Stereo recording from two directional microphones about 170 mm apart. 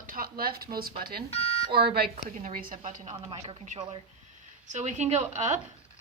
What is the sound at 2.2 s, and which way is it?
Speech, 50° right (ahead or behind).